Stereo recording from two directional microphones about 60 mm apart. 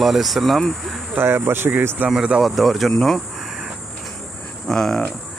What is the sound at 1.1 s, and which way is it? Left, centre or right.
Speech, right.